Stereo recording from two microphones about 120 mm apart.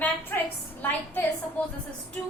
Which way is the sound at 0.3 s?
15° left (ahead or behind).